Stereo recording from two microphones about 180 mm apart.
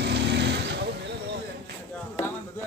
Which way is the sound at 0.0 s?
70° right (ahead or behind).